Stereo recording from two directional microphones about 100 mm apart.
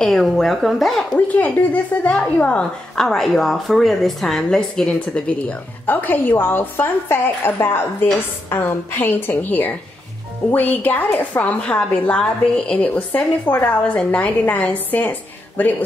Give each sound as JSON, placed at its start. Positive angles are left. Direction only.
{"t": 0.0, "sound": "a woman's voice", "side_deg": 5}
{"t": 1.1, "sound": "a woman's voice", "side_deg": 15}